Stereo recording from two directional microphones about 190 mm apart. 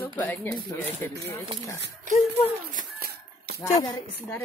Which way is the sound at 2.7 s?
50° right (ahead or behind).